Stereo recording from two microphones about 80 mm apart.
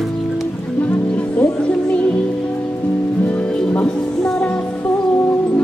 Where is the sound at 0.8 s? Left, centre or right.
Centre.